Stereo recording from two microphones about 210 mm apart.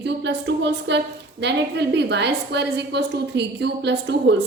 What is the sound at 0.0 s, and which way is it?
A woman's voice, 55° right (ahead or behind).